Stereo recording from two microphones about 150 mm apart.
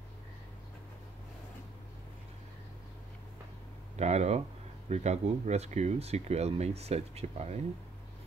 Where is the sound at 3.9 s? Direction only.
50° right (ahead or behind).